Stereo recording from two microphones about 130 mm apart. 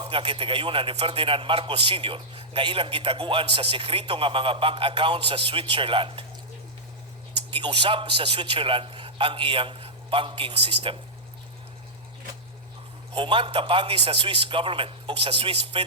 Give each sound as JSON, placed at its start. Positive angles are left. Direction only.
{"t": 0.0, "sound": "a man's voice", "side_deg": -40}
{"t": 7.5, "sound": "a man's voice", "side_deg": -40}
{"t": 13.1, "sound": "a man's voice", "side_deg": -40}